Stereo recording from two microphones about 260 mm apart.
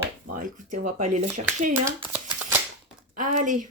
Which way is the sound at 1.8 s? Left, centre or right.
Centre.